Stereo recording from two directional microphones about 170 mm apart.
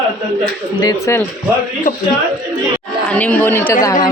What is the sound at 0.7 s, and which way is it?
Speech, 20° left (ahead or behind).